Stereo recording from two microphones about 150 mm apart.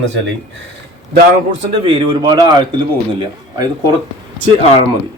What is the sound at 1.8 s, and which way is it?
Speech, 35° right (ahead or behind).